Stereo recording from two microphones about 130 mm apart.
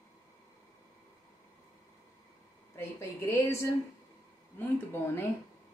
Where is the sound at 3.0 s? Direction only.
20° left (ahead or behind).